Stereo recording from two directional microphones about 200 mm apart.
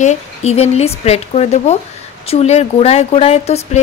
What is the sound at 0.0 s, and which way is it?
A woman's voice, 35° left (ahead or behind).